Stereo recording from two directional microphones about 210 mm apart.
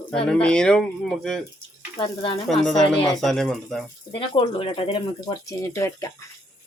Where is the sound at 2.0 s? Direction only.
25° left (ahead or behind).